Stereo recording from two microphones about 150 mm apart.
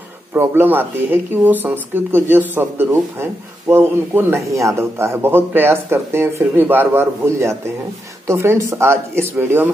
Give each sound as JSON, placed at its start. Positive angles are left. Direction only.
{"t": 0.3, "sound": "speech", "side_deg": -15}